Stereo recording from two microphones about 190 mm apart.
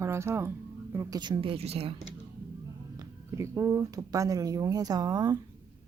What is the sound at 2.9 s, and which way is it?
Speech, 15° right (ahead or behind).